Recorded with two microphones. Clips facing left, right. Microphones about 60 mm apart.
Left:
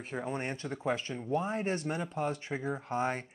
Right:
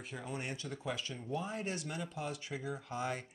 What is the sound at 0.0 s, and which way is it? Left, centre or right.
Speech, left.